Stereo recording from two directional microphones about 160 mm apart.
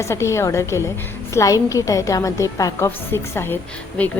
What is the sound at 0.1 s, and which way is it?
A woman's voice, 15° left (ahead or behind).